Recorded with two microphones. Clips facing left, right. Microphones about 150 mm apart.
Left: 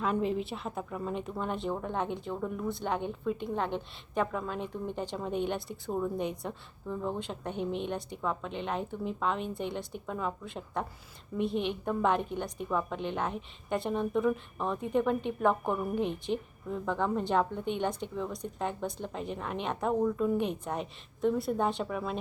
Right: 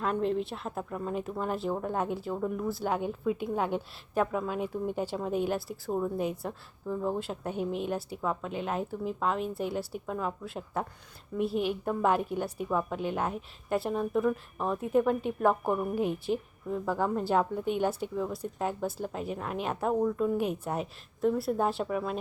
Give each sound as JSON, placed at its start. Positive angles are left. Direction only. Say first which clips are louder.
{"t": 0.0, "sound": "a woman's voice", "louder": "right 1 dB", "side_deg": 0}